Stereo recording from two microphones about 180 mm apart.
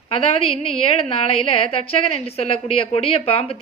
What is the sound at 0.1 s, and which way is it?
A woman's voice, 30° left (ahead or behind).